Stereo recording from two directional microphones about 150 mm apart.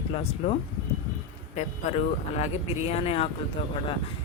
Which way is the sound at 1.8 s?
50° left (ahead or behind).